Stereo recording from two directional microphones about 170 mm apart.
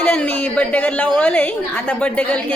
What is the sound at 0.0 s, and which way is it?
Speech, 10° left (ahead or behind).